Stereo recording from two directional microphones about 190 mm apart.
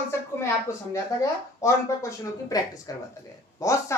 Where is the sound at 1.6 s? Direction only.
15° left (ahead or behind).